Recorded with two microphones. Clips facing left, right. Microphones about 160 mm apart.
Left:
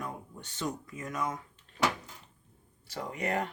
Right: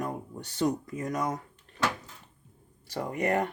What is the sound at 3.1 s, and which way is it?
Speech, 50° right (ahead or behind).